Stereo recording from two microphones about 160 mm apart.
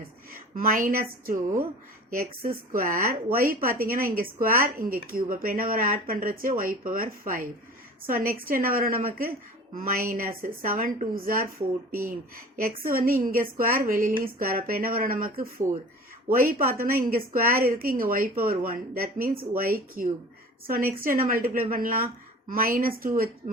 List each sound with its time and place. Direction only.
0.5 s a woman's voice: 60° right (ahead or behind)